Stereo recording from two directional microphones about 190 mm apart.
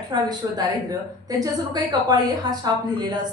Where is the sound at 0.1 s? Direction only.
20° right (ahead or behind).